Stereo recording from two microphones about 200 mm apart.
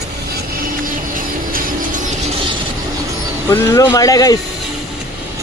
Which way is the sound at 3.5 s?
15° left (ahead or behind).